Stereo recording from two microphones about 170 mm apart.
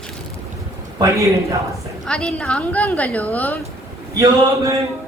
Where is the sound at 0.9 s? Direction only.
20° right (ahead or behind).